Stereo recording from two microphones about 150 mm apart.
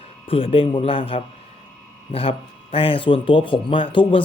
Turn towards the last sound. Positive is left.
turn(degrees=35)  # may be behind; listen again after turning